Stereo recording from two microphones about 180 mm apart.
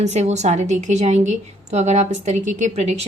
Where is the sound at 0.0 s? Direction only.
40° right (ahead or behind).